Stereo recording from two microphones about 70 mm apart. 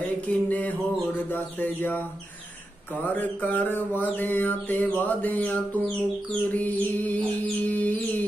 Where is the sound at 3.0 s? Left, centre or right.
Left.